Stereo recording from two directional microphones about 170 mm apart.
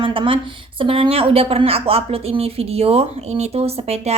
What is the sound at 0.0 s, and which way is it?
A woman's voice, 30° right (ahead or behind).